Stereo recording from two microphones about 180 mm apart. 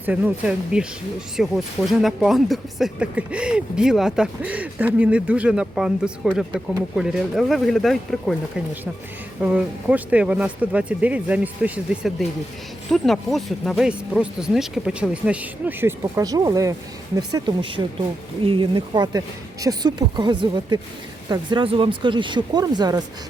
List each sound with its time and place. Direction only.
0.0 s speech: 10° right (ahead or behind)
9.4 s speech: 5° right (ahead or behind); by 23.0 s 20° right (ahead or behind)